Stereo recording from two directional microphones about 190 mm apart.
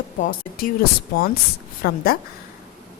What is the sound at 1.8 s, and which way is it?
Speech, 50° left (ahead or behind).